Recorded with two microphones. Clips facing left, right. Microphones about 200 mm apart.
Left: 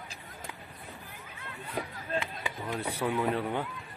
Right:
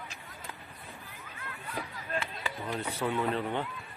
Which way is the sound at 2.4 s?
15° left (ahead or behind).